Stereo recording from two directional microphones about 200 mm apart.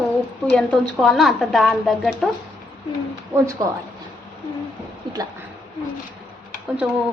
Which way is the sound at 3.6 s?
20° right (ahead or behind).